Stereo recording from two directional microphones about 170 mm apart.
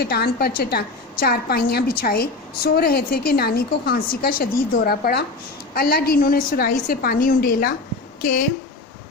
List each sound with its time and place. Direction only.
0.0 s a woman's voice: 70° left (ahead or behind); by 8.4 s 50° left (ahead or behind)